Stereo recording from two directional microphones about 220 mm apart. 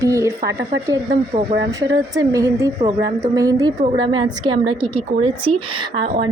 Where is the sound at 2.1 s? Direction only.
15° right (ahead or behind).